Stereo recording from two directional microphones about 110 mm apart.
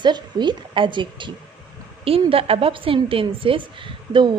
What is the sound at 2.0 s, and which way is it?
A woman's voice, 60° right (ahead or behind).